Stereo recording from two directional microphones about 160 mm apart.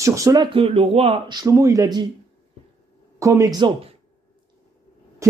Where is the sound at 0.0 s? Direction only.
20° right (ahead or behind); by 1.4 s 35° right (ahead or behind).